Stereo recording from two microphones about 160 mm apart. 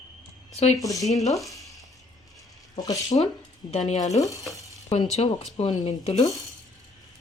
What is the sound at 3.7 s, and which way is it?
Speech, 45° left (ahead or behind).